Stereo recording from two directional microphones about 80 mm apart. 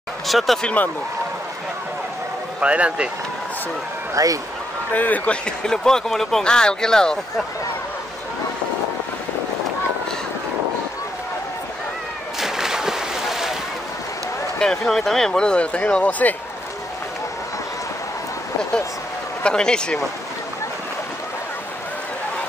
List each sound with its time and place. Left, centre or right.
0.3 s speech: centre
2.6 s speech: centre
4.1 s speech: right
4.9 s speech: left
12.4 s a sound: centre
14.6 s speech: centre
19.4 s speech: centre